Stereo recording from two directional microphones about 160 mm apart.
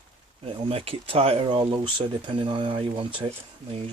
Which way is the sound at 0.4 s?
35° right (ahead or behind).